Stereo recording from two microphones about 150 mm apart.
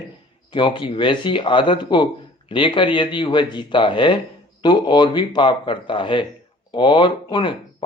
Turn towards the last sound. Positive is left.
turn(degrees=30)  # may be behind; listen again after turning